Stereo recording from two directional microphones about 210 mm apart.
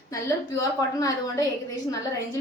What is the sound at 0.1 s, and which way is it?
A woman's voice, 15° left (ahead or behind).